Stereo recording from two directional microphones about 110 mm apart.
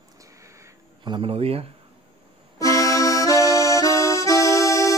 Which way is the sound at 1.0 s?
50° right (ahead or behind).